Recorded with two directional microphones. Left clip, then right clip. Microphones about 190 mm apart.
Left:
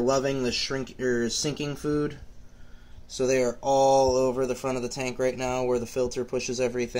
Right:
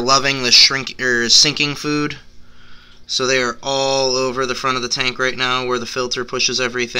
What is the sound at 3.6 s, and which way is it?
Speech, 45° right (ahead or behind).